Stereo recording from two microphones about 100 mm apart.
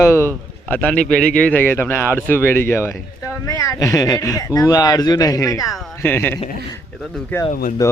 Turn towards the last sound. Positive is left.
turn(degrees=30)  # may be behind; listen again after turning